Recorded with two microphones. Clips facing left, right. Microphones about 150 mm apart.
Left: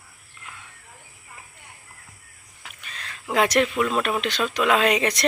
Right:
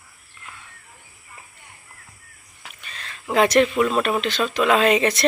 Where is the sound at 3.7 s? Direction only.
5° right (ahead or behind).